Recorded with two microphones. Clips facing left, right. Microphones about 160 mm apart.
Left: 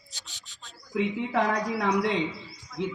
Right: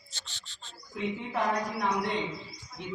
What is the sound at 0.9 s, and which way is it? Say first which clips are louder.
A man's voice: left 6 dB; 90° left.